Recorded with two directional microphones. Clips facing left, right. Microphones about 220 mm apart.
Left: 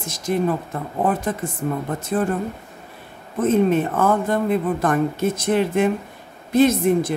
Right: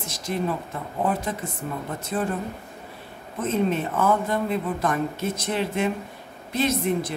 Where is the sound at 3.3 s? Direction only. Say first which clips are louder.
Left 7 dB; 50° left (ahead or behind).